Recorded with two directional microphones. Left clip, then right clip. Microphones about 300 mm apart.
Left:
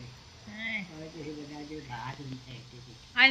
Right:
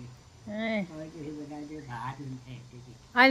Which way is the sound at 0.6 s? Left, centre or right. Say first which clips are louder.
Right 3 dB; centre.